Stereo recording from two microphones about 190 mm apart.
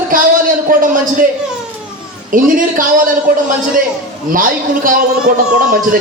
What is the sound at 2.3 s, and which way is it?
Speech, 45° right (ahead or behind).